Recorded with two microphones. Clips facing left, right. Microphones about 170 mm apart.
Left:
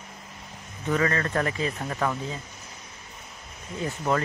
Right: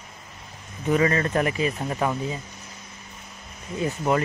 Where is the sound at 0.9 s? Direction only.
15° right (ahead or behind).